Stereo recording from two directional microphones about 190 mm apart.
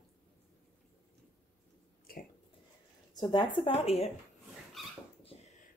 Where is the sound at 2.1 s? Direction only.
50° left (ahead or behind).